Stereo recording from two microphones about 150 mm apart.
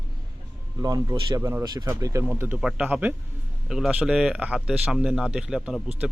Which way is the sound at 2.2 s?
10° right (ahead or behind).